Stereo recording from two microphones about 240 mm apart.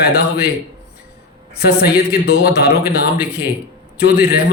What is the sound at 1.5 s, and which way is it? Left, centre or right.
A man's voice, left.